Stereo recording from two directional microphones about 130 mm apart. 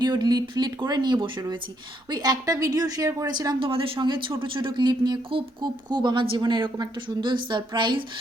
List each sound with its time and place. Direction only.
0.0 s a woman's voice: 30° right (ahead or behind)